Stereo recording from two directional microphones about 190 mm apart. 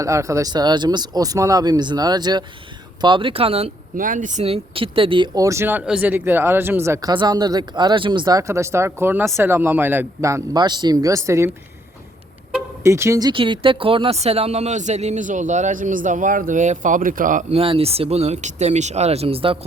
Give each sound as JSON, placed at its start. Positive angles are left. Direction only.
{"t": 0.0, "sound": "speech", "side_deg": -15}
{"t": 3.9, "sound": "speech", "side_deg": -45}
{"t": 12.8, "sound": "speech", "side_deg": -15}
{"t": 17.6, "sound": "speech", "side_deg": -30}